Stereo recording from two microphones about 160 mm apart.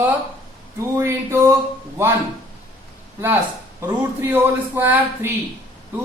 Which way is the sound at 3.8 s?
15° right (ahead or behind).